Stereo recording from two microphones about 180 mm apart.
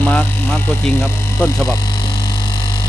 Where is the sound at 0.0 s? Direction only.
5° left (ahead or behind).